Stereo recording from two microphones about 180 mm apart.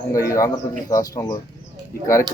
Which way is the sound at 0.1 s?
15° left (ahead or behind).